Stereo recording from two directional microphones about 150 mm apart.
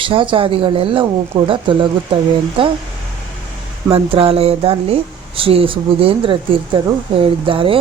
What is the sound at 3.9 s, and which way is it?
Speech, 40° right (ahead or behind).